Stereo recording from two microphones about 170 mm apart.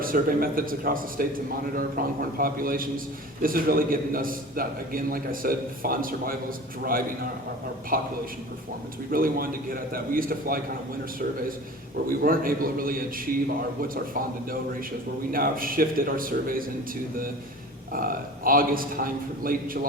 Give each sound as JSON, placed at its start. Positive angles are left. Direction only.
{"t": 0.0, "sound": "a man's voice", "side_deg": -55}
{"t": 7.9, "sound": "a man's voice", "side_deg": -55}
{"t": 9.1, "sound": "a man's voice", "side_deg": -55}
{"t": 12.0, "sound": "a man's voice", "side_deg": -55}
{"t": 17.9, "sound": "a man's voice", "side_deg": -55}